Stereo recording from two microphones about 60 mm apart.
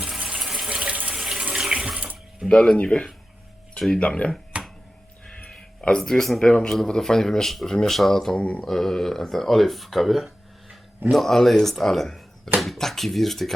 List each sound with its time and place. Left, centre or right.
0.0 s water: centre
0.7 s water tap: centre
1.7 s water: centre
2.5 s speech: centre
3.8 s speech: centre
4.0 s speech: centre
5.5 s speech: centre
8.4 s speech: centre
8.6 s speech: centre